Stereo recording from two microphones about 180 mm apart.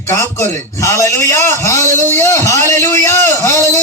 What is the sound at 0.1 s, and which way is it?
A man's voice, 15° left (ahead or behind).